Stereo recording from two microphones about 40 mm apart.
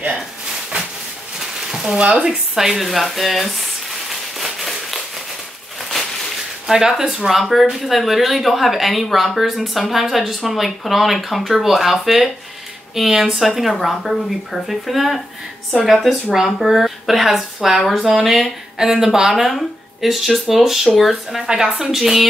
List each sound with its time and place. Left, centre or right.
1.7 s frying: centre
2.0 s speech: right
2.2 s speech: centre
2.7 s speech: centre
4.1 s a sound: centre
7.0 s speech: centre